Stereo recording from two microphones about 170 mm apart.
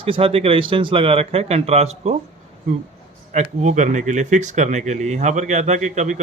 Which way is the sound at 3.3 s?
45° right (ahead or behind).